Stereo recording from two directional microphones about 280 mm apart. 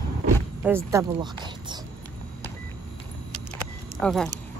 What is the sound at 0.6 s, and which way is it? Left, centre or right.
Speech, centre.